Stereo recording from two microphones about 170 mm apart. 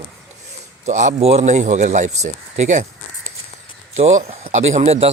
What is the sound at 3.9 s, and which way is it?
Speech, 40° right (ahead or behind).